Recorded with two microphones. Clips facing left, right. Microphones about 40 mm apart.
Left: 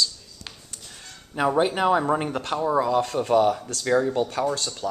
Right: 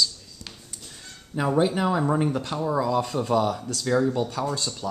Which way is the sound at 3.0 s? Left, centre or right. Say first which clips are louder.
Left 3 dB; centre.